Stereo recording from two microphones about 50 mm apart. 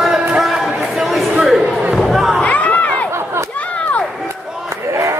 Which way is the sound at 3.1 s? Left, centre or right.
Right.